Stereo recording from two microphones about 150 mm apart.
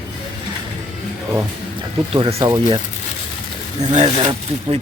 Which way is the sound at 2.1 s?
35° right (ahead or behind).